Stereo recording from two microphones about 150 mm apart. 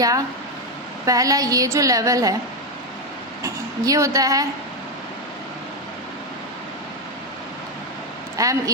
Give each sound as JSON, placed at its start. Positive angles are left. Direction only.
{"t": 1.0, "sound": "a woman's voice", "side_deg": -20}
{"t": 3.4, "sound": "speech", "side_deg": -20}
{"t": 8.4, "sound": "a woman's voice", "side_deg": -25}